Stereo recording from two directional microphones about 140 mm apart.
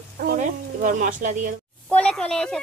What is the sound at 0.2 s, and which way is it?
A woman's voice, 80° right.